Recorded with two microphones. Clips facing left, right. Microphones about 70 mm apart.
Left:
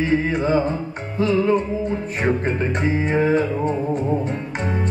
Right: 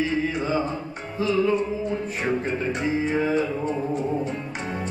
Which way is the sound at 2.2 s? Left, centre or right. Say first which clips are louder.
Left 5 dB; left.